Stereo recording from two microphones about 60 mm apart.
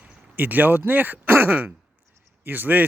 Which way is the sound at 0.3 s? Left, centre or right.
Right.